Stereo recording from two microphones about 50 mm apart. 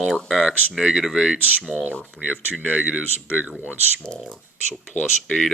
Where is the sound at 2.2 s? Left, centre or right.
Right.